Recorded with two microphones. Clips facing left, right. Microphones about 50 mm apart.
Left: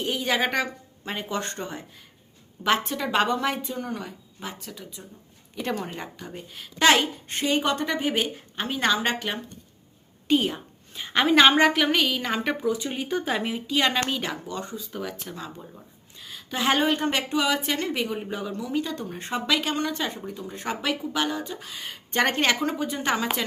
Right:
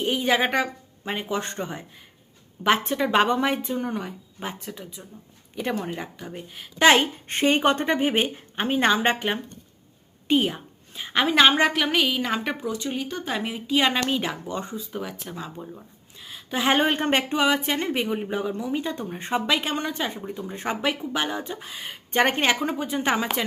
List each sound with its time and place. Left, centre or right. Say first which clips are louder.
0.0 s a woman's voice: right 3 dB; centre
5.5 s a woman's voice: right 2 dB; centre
6.7 s a woman's voice: right 2 dB; right
10.2 s a woman's voice: right 1 dB; centre
14.4 s a woman's voice: right 2 dB; right
14.8 s speech: right 1 dB; centre
16.7 s a woman's voice: right 3 dB; right; by 23.3 s centre